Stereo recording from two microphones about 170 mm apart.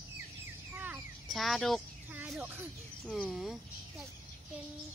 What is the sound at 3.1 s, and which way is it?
Speech, centre (ahead or behind).